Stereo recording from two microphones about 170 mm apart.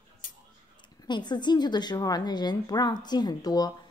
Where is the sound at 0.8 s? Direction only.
25° left (ahead or behind).